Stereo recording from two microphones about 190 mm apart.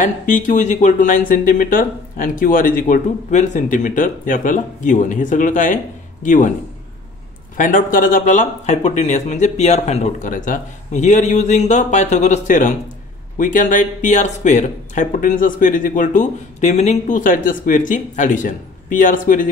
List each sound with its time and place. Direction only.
0.0 s speech: 45° left (ahead or behind)
7.5 s speech: 45° left (ahead or behind)